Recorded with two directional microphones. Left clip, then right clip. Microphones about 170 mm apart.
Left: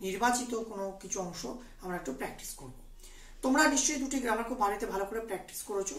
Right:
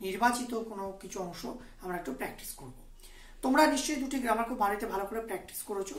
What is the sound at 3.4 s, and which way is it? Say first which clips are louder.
A woman's voice: right 1 dB; 25° right (ahead or behind).